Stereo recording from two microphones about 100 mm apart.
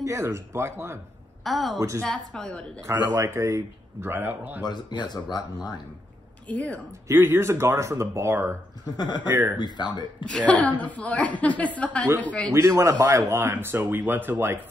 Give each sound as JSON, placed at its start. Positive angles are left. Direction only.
{"t": 0.0, "sound": "speech", "side_deg": -30}
{"t": 1.4, "sound": "a woman's voice", "side_deg": 0}
{"t": 1.8, "sound": "a woman's voice", "side_deg": -30}
{"t": 2.0, "sound": "a woman's voice", "side_deg": 5}
{"t": 2.9, "sound": "speech", "side_deg": -25}
{"t": 4.1, "sound": "a man's voice", "side_deg": -20}
{"t": 4.6, "sound": "speech", "side_deg": 45}
{"t": 6.5, "sound": "a woman's voice", "side_deg": 15}
{"t": 7.1, "sound": "speech", "side_deg": -25}
{"t": 8.8, "sound": "speech", "side_deg": 45}
{"t": 9.3, "sound": "speech", "side_deg": -25}
{"t": 9.6, "sound": "speech", "side_deg": 45}
{"t": 10.2, "sound": "a woman's voice", "side_deg": 10}
{"t": 12.5, "sound": "speech", "side_deg": -30}